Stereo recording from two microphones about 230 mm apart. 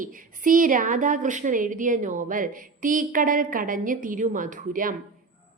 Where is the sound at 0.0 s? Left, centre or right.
Right.